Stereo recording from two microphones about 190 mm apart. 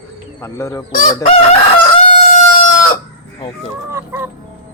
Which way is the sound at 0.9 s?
45° left (ahead or behind).